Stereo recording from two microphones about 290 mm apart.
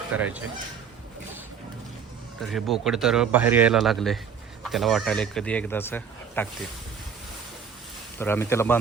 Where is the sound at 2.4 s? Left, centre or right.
Centre.